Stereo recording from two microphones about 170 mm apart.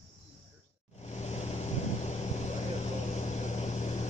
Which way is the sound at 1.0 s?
40° left (ahead or behind).